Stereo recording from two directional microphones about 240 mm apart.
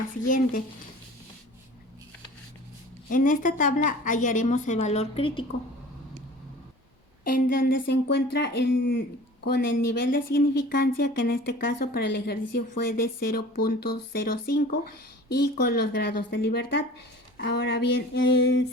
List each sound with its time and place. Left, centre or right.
0.3 s speech: left
3.1 s speech: left
7.3 s a woman's voice: left